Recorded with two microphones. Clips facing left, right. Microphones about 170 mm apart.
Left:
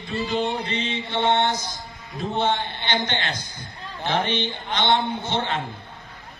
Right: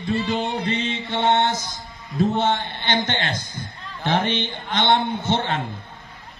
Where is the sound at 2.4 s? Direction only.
50° right (ahead or behind).